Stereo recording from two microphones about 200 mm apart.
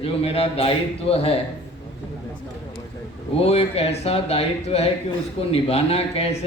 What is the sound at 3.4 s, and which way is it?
Speech, 30° left (ahead or behind).